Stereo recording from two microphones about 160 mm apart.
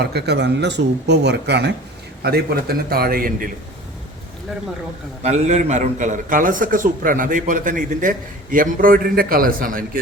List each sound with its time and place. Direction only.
0.0 s speech: 90° right
2.2 s a man's voice: 75° right (ahead or behind)
5.2 s a man's voice: 45° right (ahead or behind); by 10.0 s 60° right (ahead or behind)